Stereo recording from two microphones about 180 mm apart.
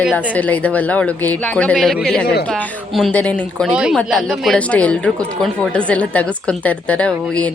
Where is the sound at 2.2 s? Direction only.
65° left (ahead or behind).